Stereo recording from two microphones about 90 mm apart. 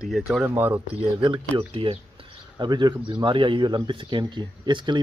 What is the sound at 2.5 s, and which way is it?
Speech, 50° right (ahead or behind).